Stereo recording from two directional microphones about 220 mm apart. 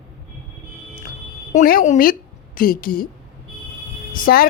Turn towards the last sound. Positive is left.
turn(degrees=40)  # may be behind; listen again after turning